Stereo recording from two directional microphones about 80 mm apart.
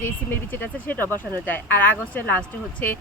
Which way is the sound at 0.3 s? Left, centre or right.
Left.